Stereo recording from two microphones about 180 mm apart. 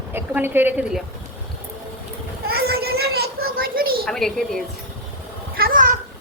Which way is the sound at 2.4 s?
60° right (ahead or behind).